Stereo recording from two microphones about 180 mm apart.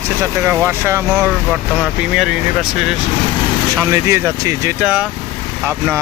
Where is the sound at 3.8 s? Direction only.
15° right (ahead or behind).